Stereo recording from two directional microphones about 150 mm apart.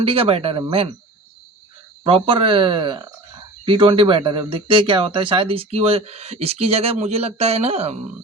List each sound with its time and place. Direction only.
0.0 s speech: 40° right (ahead or behind)
2.0 s speech: 35° right (ahead or behind)